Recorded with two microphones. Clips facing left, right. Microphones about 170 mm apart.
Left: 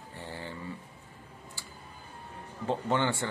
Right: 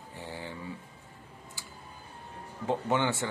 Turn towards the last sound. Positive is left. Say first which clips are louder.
# even
turn(degrees=-15)  # may be behind; listen again after turning